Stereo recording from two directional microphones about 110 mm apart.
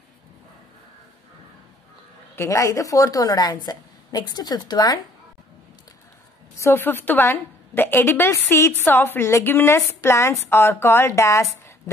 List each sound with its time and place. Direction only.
2.3 s a woman's voice: 25° left (ahead or behind)
6.6 s a woman's voice: 20° left (ahead or behind)